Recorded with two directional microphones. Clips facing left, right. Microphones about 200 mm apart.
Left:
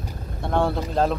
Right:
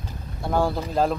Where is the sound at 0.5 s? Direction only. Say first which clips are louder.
Left 1 dB; 5° right (ahead or behind).